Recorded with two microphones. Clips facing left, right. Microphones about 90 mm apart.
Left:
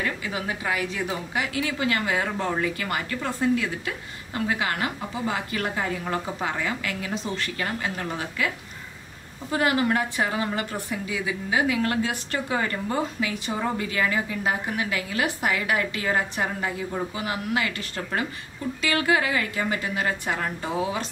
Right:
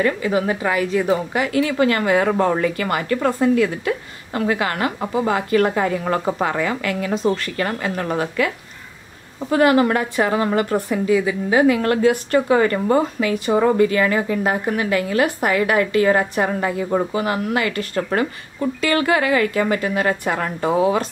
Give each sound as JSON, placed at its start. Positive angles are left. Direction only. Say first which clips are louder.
{"t": 0.0, "sound": "a woman's voice", "louder": "right 10 dB", "side_deg": -50}
{"t": 9.5, "sound": "a woman's voice", "louder": "right 8 dB", "side_deg": -70}
{"t": 12.9, "sound": "a woman's voice", "louder": "right 9 dB", "side_deg": -55}